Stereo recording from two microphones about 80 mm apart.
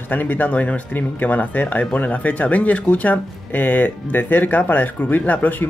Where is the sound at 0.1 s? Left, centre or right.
Left.